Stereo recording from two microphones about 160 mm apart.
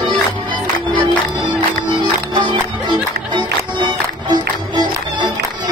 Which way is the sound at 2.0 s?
30° right (ahead or behind).